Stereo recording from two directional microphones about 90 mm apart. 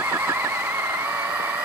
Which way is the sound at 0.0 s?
25° right (ahead or behind).